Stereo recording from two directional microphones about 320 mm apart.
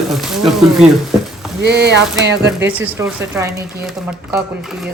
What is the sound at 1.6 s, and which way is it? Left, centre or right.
Speech, right.